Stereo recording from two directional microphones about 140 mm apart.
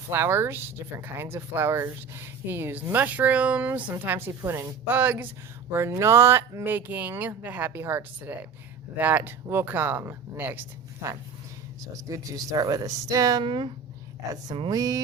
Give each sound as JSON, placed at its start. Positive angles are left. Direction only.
{"t": 0.1, "sound": "speech", "side_deg": -15}
{"t": 11.8, "sound": "speech", "side_deg": -25}
{"t": 14.7, "sound": "speech", "side_deg": -25}